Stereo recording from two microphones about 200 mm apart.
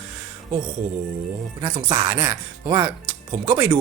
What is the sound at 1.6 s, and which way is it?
Speech, 20° right (ahead or behind).